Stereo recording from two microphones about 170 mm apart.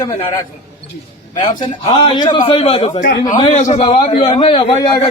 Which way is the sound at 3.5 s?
45° left (ahead or behind).